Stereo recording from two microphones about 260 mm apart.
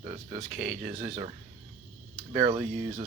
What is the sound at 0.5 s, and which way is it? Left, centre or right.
Speech, centre.